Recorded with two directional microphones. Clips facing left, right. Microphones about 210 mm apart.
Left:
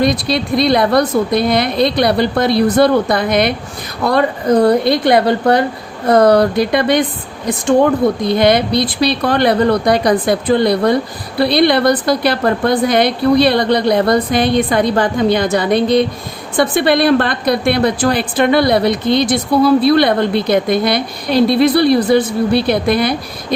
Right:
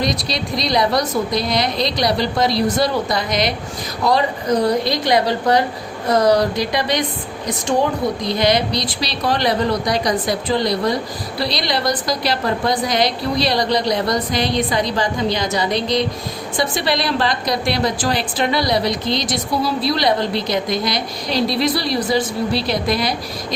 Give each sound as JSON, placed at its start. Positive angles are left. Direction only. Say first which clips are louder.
{"t": 0.0, "sound": "a woman's voice", "louder": "left 7 dB", "side_deg": 55}
{"t": 8.2, "sound": "a woman's voice", "louder": "left 5 dB", "side_deg": 55}